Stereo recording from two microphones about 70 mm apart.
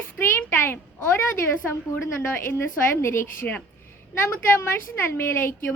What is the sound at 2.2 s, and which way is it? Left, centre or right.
A woman's voice, left.